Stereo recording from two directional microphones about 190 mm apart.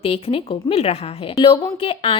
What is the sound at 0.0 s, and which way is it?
A woman's voice, 30° left (ahead or behind).